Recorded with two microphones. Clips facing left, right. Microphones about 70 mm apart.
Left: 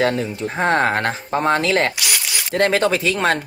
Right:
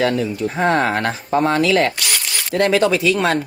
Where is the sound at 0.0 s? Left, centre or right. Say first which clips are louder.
Right 1 dB; left.